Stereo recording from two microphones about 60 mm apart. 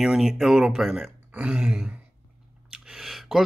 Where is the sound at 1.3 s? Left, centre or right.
Right.